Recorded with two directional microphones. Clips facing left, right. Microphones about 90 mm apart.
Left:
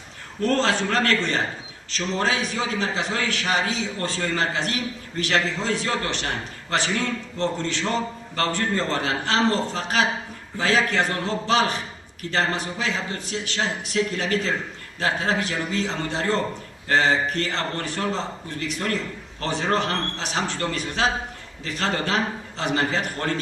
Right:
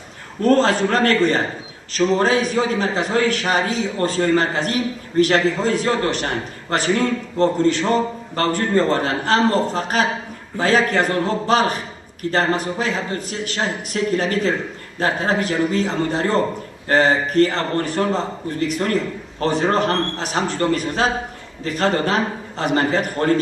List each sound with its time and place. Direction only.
0.4 s a man's voice: 40° right (ahead or behind)
19.4 s a man's voice: 40° right (ahead or behind)